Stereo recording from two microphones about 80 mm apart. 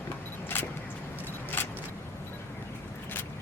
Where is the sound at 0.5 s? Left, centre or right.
Left.